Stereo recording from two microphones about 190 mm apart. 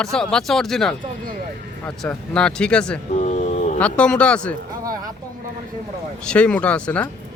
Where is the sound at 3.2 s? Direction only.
40° left (ahead or behind).